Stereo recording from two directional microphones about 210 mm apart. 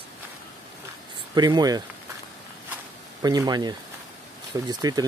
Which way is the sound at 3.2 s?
20° right (ahead or behind).